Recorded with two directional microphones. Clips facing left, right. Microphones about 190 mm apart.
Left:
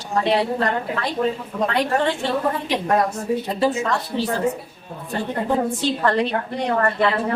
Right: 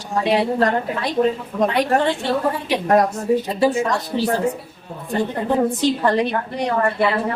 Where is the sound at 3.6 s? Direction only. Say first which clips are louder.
Right 2 dB; 15° right (ahead or behind).